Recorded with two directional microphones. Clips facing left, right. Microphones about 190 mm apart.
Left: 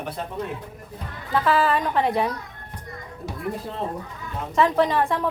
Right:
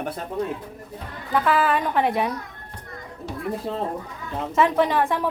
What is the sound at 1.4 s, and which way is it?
Speech, centre (ahead or behind).